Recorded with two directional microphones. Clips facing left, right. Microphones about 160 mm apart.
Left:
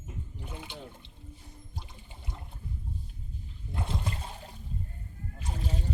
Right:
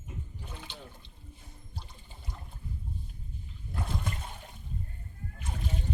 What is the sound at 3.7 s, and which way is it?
Water, 25° left (ahead or behind).